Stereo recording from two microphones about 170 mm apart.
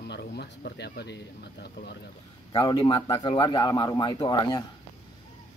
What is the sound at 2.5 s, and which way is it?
Speech, 25° left (ahead or behind).